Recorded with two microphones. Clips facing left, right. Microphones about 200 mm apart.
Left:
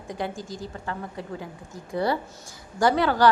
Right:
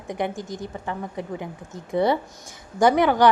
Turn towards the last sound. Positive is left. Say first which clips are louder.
# right 3 dB
turn(degrees=-20)  # may be behind; listen again after turning